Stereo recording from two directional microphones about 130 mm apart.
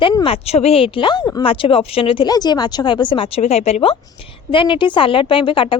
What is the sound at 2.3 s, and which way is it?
Speech, 30° left (ahead or behind).